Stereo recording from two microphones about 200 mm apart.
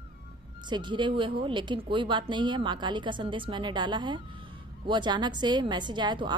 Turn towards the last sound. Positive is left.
turn(degrees=-20)  # may be behind; listen again after turning